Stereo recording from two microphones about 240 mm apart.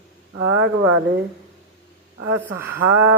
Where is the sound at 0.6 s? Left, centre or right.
Right.